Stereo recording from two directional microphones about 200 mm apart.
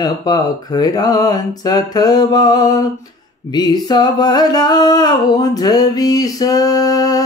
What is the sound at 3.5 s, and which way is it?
Music, 20° left (ahead or behind).